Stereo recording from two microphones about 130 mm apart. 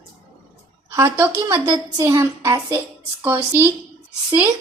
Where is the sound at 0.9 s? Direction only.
20° right (ahead or behind).